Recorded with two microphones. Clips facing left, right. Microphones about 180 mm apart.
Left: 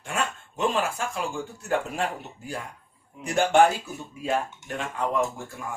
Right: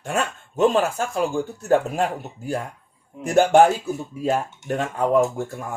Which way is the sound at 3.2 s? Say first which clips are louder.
Right 5 dB; 45° right (ahead or behind).